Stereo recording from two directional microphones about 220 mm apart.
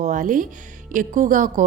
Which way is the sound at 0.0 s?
35° right (ahead or behind).